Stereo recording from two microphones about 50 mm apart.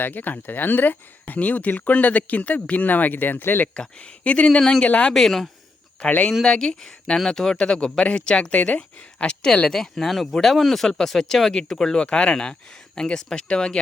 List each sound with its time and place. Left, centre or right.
0.0 s speech: left
3.8 s speech: left
5.1 s speech: centre
12.0 s speech: left